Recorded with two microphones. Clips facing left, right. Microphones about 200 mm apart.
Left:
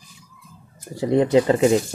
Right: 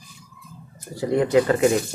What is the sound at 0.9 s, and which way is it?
Speech, 25° left (ahead or behind).